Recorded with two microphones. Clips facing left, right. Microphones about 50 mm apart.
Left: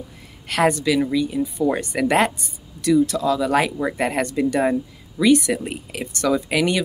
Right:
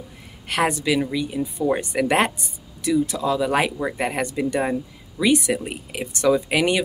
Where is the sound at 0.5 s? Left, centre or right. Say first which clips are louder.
Left 2 dB; right.